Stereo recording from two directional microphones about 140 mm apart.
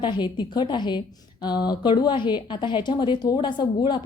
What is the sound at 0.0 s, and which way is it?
A woman's voice, 30° left (ahead or behind).